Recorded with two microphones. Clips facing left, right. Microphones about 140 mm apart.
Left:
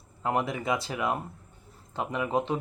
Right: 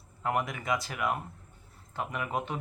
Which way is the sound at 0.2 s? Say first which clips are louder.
Left 3 dB; 25° left (ahead or behind).